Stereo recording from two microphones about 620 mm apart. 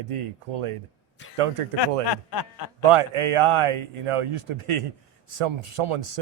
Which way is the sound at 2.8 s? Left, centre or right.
Right.